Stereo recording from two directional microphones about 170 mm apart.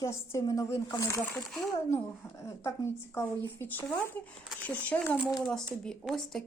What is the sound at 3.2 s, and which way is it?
A woman's voice, 10° left (ahead or behind).